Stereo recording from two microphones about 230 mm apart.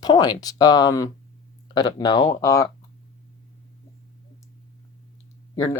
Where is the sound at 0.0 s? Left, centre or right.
Centre.